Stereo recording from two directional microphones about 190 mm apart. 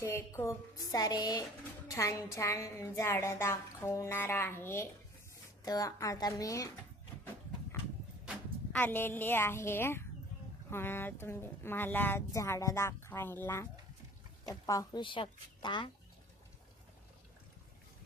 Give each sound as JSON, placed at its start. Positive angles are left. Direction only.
{"t": 0.0, "sound": "a woman's voice", "side_deg": 15}
{"t": 8.7, "sound": "a woman's voice", "side_deg": 10}